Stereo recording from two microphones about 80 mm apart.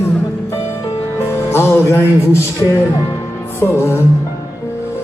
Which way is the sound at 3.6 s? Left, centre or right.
Left.